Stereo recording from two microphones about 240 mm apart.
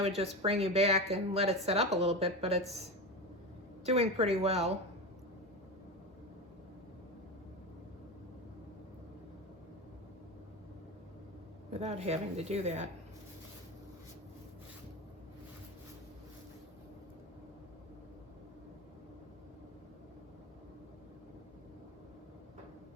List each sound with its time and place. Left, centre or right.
0.2 s speech: right
3.8 s speech: right
11.7 s speech: right